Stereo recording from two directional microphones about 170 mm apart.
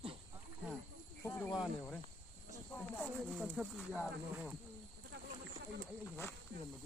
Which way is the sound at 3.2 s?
Centre (ahead or behind).